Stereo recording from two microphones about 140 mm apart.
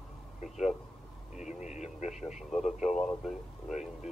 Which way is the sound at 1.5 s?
60° left (ahead or behind).